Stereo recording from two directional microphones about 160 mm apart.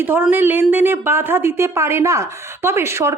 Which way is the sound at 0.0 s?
10° right (ahead or behind).